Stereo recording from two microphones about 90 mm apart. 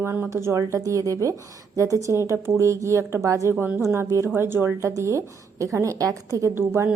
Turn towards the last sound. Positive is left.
turn(degrees=-30)  # may be behind; listen again after turning